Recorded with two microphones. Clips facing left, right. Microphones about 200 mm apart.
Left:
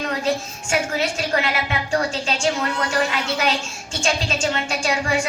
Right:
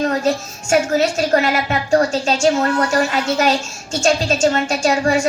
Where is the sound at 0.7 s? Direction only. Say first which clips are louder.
Right 7 dB; 45° right (ahead or behind).